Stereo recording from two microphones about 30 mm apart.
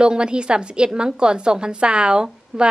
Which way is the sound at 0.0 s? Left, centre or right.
Right.